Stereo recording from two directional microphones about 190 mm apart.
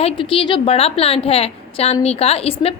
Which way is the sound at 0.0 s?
30° left (ahead or behind).